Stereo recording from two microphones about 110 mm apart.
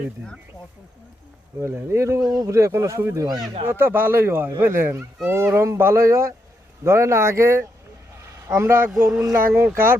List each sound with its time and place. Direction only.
1.6 s speech: 25° right (ahead or behind)
3.7 s speech: 20° right (ahead or behind)